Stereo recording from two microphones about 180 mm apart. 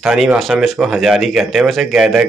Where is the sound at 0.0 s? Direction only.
Centre (ahead or behind).